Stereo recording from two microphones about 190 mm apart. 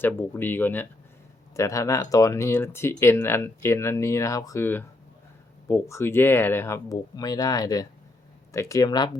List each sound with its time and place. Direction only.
0.0 s speech: 10° left (ahead or behind)